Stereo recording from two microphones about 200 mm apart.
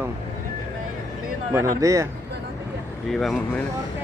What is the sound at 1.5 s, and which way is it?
Speech, 15° right (ahead or behind).